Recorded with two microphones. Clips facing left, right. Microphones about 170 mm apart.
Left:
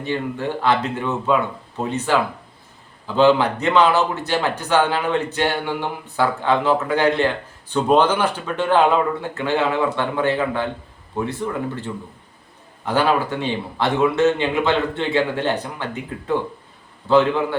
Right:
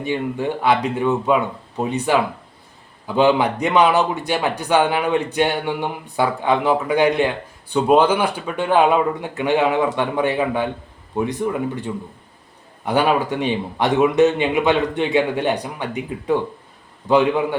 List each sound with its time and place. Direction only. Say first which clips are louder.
0.0 s speech: right 2 dB; 15° right (ahead or behind)